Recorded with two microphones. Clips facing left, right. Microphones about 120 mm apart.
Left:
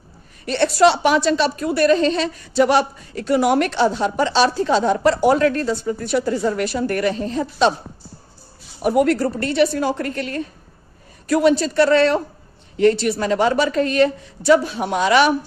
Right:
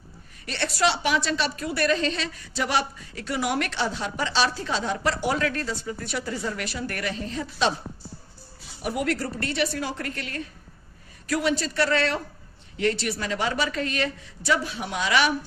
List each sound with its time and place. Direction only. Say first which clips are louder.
0.4 s speech: left 10 dB; 35° left (ahead or behind)
8.8 s speech: left 10 dB; 40° left (ahead or behind)